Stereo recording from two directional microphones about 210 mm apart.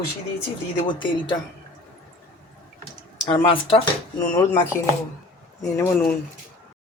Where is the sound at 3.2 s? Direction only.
25° left (ahead or behind).